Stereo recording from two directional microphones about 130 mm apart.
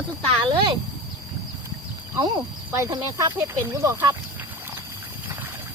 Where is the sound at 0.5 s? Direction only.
40° right (ahead or behind).